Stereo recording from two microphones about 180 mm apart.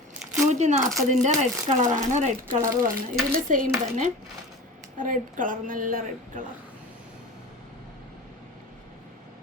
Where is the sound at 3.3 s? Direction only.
45° right (ahead or behind).